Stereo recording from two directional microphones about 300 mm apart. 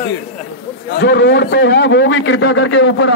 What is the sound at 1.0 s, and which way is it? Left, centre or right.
A man's voice, left.